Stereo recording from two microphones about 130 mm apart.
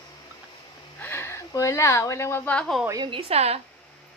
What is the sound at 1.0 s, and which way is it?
Speech, 15° left (ahead or behind).